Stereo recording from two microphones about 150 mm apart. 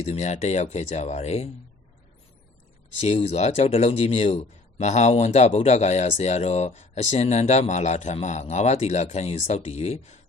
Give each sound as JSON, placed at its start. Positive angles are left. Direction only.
{"t": 0.0, "sound": "speech", "side_deg": 45}
{"t": 3.0, "sound": "speech", "side_deg": 45}